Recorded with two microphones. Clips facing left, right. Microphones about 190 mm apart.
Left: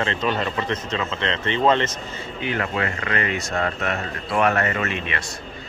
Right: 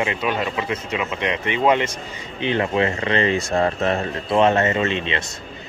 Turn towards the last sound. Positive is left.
turn(degrees=-25)  # may be behind; listen again after turning